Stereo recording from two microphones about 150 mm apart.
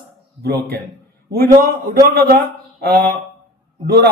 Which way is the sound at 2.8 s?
90° right.